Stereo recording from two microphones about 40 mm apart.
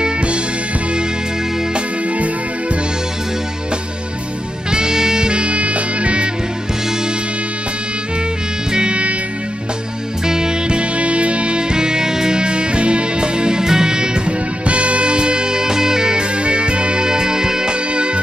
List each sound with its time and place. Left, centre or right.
0.0 s music: right
4.6 s music: centre
8.7 s music: right
10.2 s music: centre
10.8 s music: right